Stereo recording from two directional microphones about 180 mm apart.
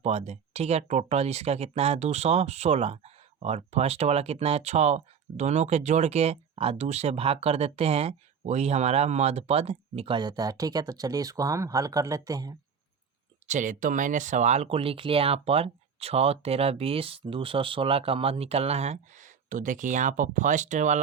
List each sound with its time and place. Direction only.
0.0 s speech: 35° right (ahead or behind); by 12.5 s 20° right (ahead or behind)
13.5 s speech: 45° right (ahead or behind)